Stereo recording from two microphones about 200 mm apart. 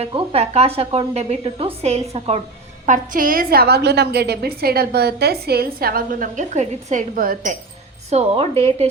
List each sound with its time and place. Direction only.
0.0 s a woman's voice: 30° right (ahead or behind)
2.8 s a woman's voice: 40° right (ahead or behind)
8.1 s a woman's voice: 30° right (ahead or behind)